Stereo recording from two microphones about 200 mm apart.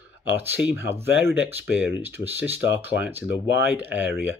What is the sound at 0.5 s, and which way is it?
Speech, 10° right (ahead or behind).